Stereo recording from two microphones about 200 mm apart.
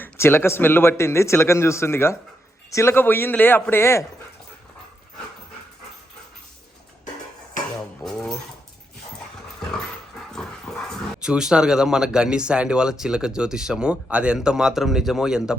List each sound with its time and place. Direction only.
0.0 s a man's voice: 10° left (ahead or behind)
8.0 s a sound: centre (ahead or behind)
10.8 s speech: centre (ahead or behind)